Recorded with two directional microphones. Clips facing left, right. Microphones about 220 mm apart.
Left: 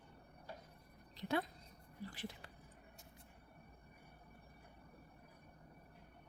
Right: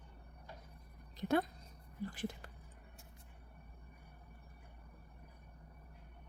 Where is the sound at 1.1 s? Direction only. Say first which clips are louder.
Right 5 dB; 50° right (ahead or behind).